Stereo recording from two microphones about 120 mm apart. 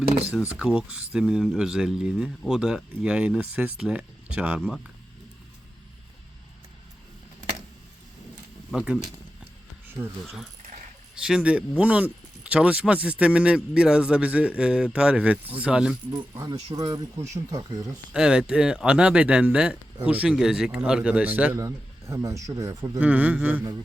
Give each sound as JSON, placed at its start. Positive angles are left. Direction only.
{"t": 0.3, "sound": "speech", "side_deg": -5}
{"t": 8.7, "sound": "speech", "side_deg": -5}
{"t": 10.0, "sound": "speech", "side_deg": -20}
{"t": 11.1, "sound": "speech", "side_deg": -5}
{"t": 16.3, "sound": "speech", "side_deg": -25}
{"t": 18.1, "sound": "speech", "side_deg": -5}
{"t": 21.6, "sound": "speech", "side_deg": -25}
{"t": 23.0, "sound": "speech", "side_deg": -10}